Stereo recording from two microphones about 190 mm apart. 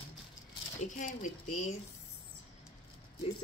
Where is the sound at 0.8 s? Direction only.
40° left (ahead or behind).